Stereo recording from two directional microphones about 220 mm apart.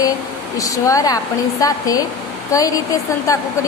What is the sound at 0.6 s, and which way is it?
A woman's voice, 15° left (ahead or behind).